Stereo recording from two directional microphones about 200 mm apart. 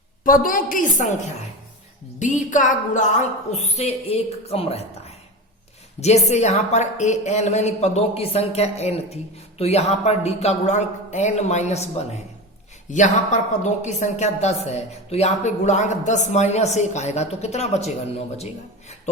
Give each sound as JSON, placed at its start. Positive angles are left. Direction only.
{"t": 0.3, "sound": "a woman's voice", "side_deg": 45}
{"t": 2.1, "sound": "a woman's voice", "side_deg": 40}